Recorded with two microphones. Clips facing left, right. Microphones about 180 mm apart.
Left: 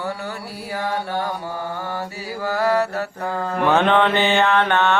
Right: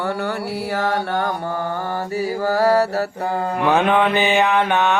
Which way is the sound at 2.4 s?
40° right (ahead or behind).